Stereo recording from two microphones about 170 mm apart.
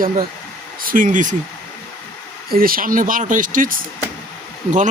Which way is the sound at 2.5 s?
60° right (ahead or behind).